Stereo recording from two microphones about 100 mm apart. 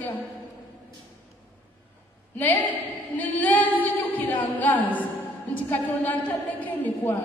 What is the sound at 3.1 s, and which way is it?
A woman's voice, 15° left (ahead or behind).